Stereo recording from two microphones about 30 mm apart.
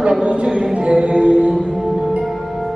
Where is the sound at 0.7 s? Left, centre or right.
Right.